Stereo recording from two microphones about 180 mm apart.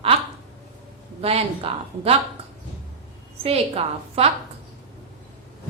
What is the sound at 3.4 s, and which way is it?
Speech, 35° right (ahead or behind).